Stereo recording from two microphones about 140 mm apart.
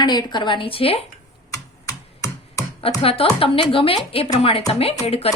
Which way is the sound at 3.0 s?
45° left (ahead or behind).